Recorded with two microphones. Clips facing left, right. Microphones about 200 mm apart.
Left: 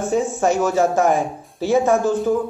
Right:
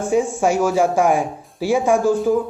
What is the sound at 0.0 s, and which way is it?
A man's voice, 10° right (ahead or behind).